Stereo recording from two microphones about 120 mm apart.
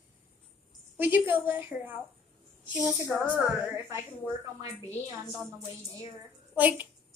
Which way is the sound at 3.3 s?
10° right (ahead or behind).